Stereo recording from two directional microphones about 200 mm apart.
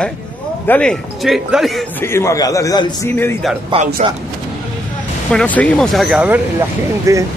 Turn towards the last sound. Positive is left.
turn(degrees=-15)  # may be behind; listen again after turning